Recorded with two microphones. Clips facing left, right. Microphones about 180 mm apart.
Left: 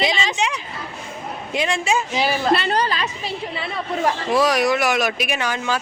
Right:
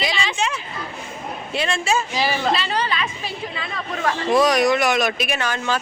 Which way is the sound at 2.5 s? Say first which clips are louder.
Left 4 dB; 55° left (ahead or behind).